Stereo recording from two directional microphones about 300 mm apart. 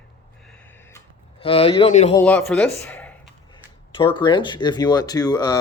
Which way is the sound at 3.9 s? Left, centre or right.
Centre.